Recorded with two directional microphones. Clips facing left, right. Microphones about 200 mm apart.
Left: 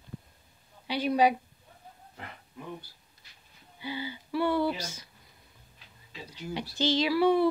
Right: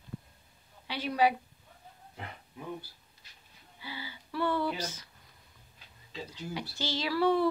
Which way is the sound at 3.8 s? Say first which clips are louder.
Left 8 dB; 20° left (ahead or behind).